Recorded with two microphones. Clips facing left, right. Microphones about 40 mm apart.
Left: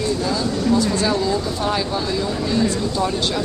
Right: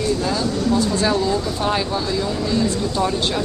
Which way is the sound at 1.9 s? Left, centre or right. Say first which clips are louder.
Even; centre.